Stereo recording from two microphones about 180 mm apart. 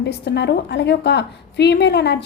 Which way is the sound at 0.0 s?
70° left (ahead or behind).